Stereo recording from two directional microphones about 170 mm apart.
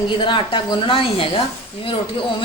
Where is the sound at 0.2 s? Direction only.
30° left (ahead or behind).